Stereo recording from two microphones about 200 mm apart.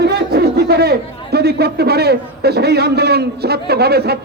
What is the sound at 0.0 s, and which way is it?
A man's voice, 55° right (ahead or behind).